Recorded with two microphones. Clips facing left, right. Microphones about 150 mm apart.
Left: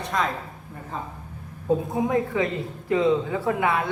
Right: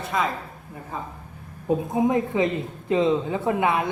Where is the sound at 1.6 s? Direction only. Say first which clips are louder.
Right 2 dB; 20° right (ahead or behind).